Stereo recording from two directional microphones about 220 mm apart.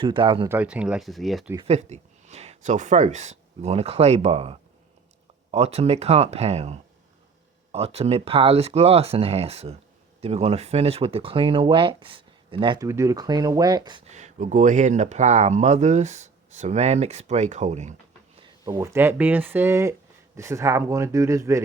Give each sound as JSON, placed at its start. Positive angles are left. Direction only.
{"t": 0.0, "sound": "speech", "side_deg": -20}
{"t": 0.4, "sound": "speech", "side_deg": -5}
{"t": 1.5, "sound": "speech", "side_deg": -30}
{"t": 14.1, "sound": "speech", "side_deg": -30}
{"t": 18.3, "sound": "speech", "side_deg": -20}